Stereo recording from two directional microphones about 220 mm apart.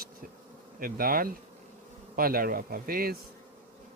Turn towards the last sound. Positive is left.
turn(degrees=-40)  # may be behind; listen again after turning